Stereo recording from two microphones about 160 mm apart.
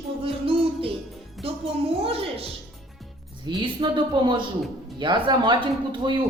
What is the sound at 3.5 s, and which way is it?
Speech, 30° right (ahead or behind).